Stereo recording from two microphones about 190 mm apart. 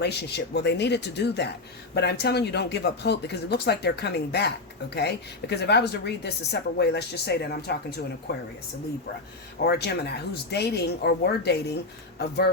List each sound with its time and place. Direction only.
0.0 s a woman's voice: 60° left (ahead or behind)
9.6 s a woman's voice: 60° left (ahead or behind)